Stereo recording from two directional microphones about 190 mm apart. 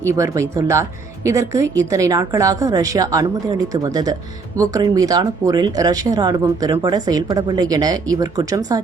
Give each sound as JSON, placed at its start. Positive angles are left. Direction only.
{"t": 0.0, "sound": "speech", "side_deg": -15}